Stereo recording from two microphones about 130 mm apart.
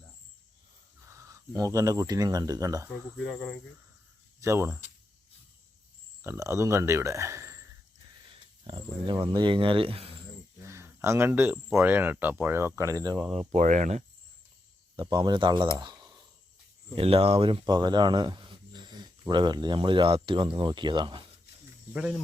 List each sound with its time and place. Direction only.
1.0 s speech: 25° right (ahead or behind)
3.2 s cricket: 5° left (ahead or behind)
4.4 s speech: 20° right (ahead or behind)
6.2 s speech: 20° right (ahead or behind)
8.2 s speech: 40° right (ahead or behind)
10.6 s speech: 20° right (ahead or behind)
13.5 s speech: 70° right (ahead or behind)
14.9 s speech: 35° right (ahead or behind)
15.8 s a sound: 35° right (ahead or behind)
16.9 s speech: 50° right (ahead or behind)